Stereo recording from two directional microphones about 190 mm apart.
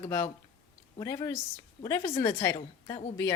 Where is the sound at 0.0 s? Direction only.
15° left (ahead or behind).